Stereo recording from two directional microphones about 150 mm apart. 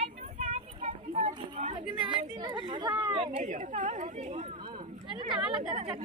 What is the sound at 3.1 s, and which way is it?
Speech, 40° right (ahead or behind).